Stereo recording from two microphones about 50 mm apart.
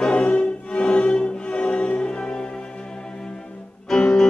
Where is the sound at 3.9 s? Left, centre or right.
Centre.